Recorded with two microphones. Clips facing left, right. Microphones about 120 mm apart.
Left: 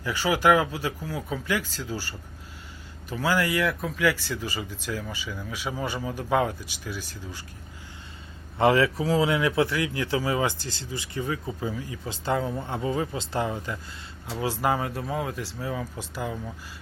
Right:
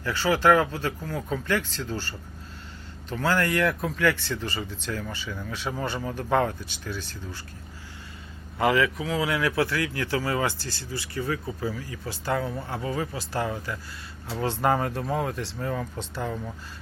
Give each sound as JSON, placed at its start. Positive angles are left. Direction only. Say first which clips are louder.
{"t": 0.0, "sound": "speech", "louder": "right 1 dB", "side_deg": 15}
{"t": 8.5, "sound": "speech", "louder": "left 2 dB", "side_deg": 30}
{"t": 14.3, "sound": "speech", "louder": "right 1 dB", "side_deg": 10}